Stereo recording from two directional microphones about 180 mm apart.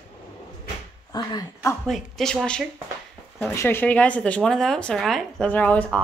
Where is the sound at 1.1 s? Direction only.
20° left (ahead or behind).